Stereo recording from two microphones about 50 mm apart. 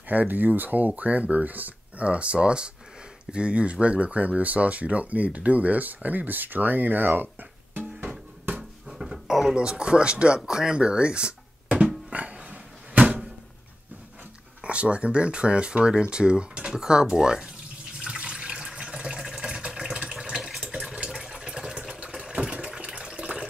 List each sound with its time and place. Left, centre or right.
0.1 s speech: right
8.8 s dog: centre
9.6 s a sound: centre
14.6 s speech: right
17.9 s water tap: centre
20.2 s a sound: centre
21.1 s water: centre